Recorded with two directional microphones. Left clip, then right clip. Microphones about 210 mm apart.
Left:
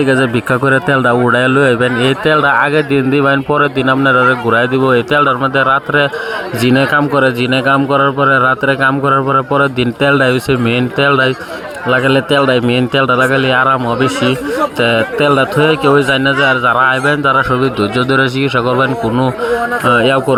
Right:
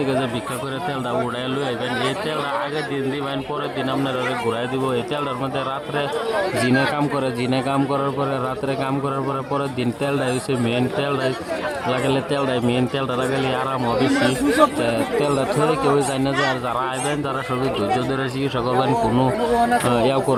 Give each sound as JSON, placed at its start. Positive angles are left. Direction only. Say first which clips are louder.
{"t": 0.6, "sound": "a man's voice", "louder": "left 15 dB", "side_deg": 30}
{"t": 1.8, "sound": "a man's voice", "louder": "left 10 dB", "side_deg": 70}
{"t": 3.2, "sound": "a man's voice", "louder": "left 14 dB", "side_deg": 30}
{"t": 14.8, "sound": "speech", "louder": "left 9 dB", "side_deg": 15}